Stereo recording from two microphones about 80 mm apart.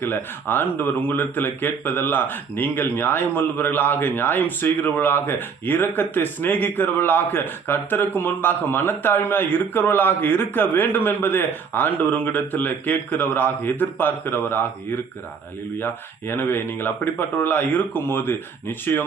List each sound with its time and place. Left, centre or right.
0.0 s speech: left
15.8 s speech: left